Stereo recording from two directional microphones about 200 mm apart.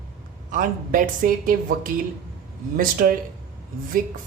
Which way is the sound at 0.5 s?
45° right (ahead or behind).